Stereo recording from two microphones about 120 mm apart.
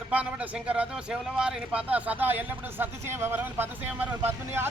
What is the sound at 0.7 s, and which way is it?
Speech, 10° right (ahead or behind).